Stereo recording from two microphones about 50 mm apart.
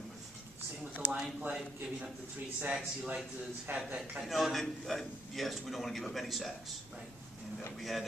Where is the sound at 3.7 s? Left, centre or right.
Right.